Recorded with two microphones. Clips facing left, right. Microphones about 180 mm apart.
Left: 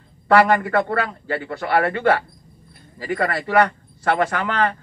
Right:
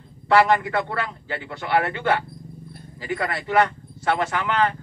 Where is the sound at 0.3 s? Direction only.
45° left (ahead or behind).